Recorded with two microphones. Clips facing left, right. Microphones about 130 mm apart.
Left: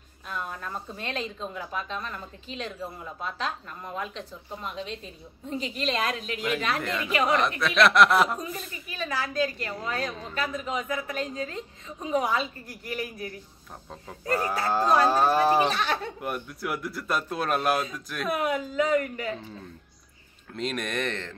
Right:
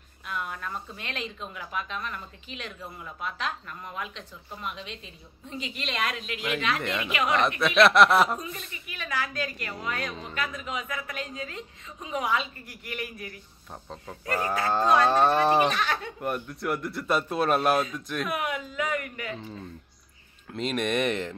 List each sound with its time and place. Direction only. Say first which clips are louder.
0.3 s speech: even; 30° left (ahead or behind)
6.8 s speech: even; centre (ahead or behind)
7.1 s speech: left 4 dB; 35° left (ahead or behind)
7.6 s speech: right 1 dB; centre (ahead or behind)
8.4 s speech: left 3 dB; 35° left (ahead or behind)
15.0 s moo: even; 5° left (ahead or behind)
15.7 s speech: left 1 dB; 30° left (ahead or behind)
16.2 s speech: right 1 dB; centre (ahead or behind)
18.3 s speech: left 4 dB; 35° left (ahead or behind)
20.5 s speech: right 3 dB; centre (ahead or behind)